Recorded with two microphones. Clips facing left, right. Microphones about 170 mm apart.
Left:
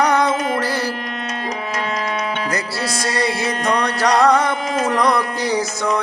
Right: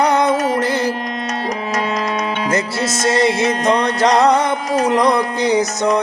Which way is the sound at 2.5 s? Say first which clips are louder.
Right 4 dB; 20° right (ahead or behind).